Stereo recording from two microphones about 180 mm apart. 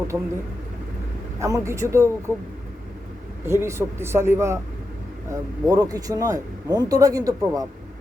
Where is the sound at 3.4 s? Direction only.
15° right (ahead or behind).